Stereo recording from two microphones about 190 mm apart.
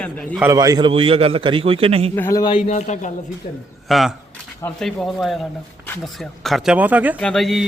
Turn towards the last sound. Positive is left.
turn(degrees=0)  # may be behind; listen again after turning